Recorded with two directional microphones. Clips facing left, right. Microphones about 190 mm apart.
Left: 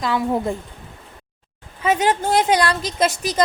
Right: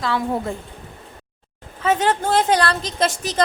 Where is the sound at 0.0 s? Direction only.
15° left (ahead or behind).